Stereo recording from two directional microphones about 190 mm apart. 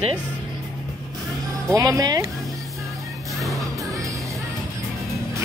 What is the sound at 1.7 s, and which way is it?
Speech, 20° right (ahead or behind).